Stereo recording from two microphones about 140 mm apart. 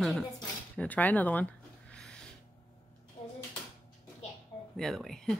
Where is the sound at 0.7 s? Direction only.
10° left (ahead or behind).